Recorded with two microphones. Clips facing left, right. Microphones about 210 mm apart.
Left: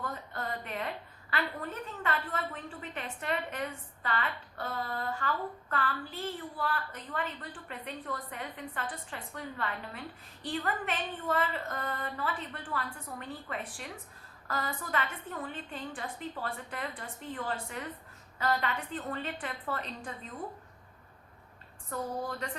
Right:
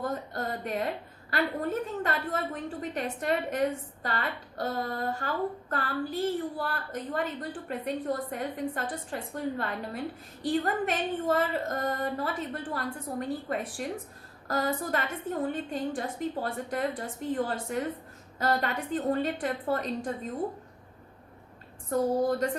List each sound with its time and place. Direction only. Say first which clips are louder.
0.0 s a woman's voice: right 6 dB; 40° right (ahead or behind)
21.8 s a woman's voice: right 10 dB; 45° right (ahead or behind)